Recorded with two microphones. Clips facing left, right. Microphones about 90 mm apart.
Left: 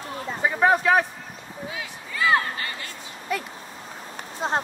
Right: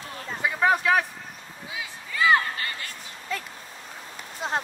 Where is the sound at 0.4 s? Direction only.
40° left (ahead or behind).